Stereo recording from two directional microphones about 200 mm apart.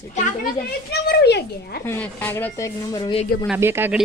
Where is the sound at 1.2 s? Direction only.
55° left (ahead or behind).